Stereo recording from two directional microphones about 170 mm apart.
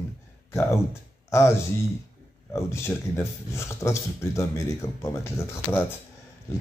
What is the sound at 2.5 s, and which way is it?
Speech, 15° left (ahead or behind).